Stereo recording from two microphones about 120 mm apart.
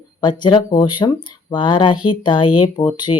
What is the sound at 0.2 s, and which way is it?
Speech, 40° left (ahead or behind).